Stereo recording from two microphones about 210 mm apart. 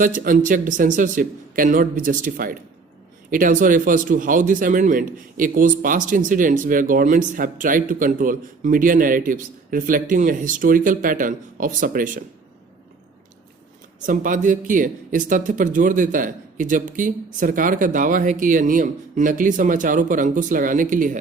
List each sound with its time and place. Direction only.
0.0 s speech: 40° right (ahead or behind)
14.1 s speech: 40° right (ahead or behind)